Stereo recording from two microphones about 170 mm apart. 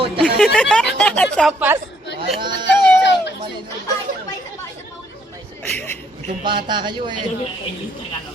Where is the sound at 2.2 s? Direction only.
25° right (ahead or behind).